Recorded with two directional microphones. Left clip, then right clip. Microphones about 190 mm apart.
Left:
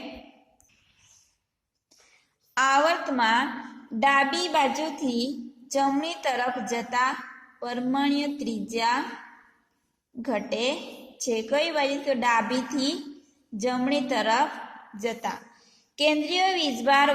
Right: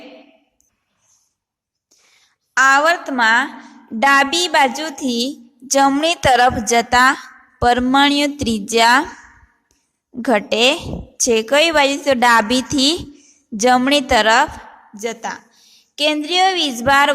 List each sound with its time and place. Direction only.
2.6 s a woman's voice: 30° right (ahead or behind); by 9.0 s 45° right (ahead or behind)
10.2 s a woman's voice: 45° right (ahead or behind)
14.9 s speech: 30° right (ahead or behind)